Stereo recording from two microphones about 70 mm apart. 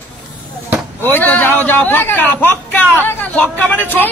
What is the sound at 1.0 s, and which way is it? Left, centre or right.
A man's voice, left.